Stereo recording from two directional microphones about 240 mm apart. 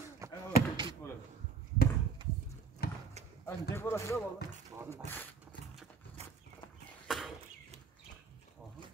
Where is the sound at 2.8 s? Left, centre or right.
Left.